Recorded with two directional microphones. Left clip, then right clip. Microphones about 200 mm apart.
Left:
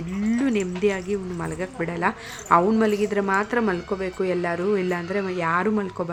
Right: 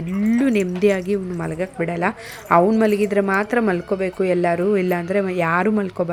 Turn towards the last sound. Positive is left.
turn(degrees=-20)  # may be behind; listen again after turning